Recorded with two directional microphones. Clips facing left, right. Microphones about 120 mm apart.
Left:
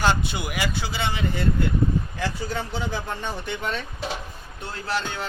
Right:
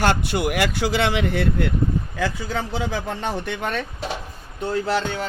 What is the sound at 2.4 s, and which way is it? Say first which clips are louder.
Speech: right 3 dB; 90° right.